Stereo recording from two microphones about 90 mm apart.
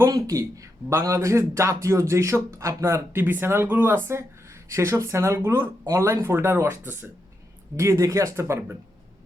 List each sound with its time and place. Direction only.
0.0 s speech: 40° right (ahead or behind); by 7.1 s 20° right (ahead or behind)
7.8 s speech: 35° right (ahead or behind)